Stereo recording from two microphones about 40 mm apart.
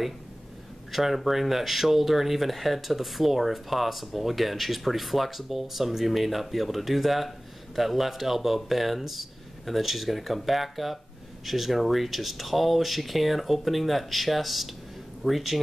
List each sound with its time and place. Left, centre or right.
0.9 s speech: centre